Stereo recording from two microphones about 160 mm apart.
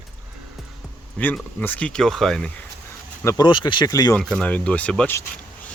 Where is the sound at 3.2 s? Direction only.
25° left (ahead or behind).